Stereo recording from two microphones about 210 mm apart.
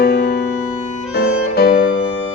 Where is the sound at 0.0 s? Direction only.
50° left (ahead or behind).